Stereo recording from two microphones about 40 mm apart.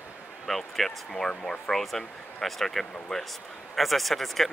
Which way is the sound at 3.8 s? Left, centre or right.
Centre.